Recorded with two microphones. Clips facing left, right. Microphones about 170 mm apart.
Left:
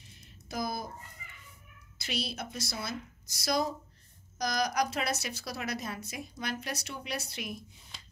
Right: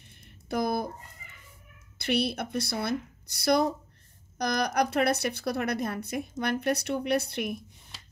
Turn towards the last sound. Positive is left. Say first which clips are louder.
# right 10 dB
turn(degrees=-55)  # may be behind; listen again after turning